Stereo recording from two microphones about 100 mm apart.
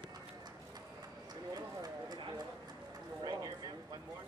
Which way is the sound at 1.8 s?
45° right (ahead or behind).